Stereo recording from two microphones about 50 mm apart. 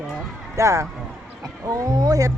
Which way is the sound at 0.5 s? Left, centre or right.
Right.